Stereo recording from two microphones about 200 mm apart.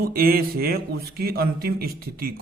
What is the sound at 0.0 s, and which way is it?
A man's voice, 50° right (ahead or behind).